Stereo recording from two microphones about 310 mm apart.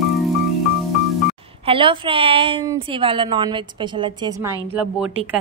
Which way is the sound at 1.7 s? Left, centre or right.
Centre.